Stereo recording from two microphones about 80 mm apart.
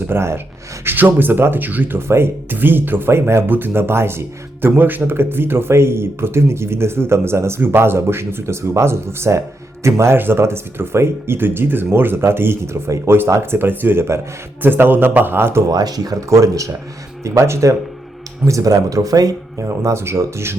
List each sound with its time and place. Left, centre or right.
0.1 s speech: right
15.7 s speech: right